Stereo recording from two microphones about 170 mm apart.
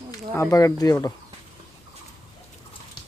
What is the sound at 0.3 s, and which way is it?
Speech, 20° left (ahead or behind).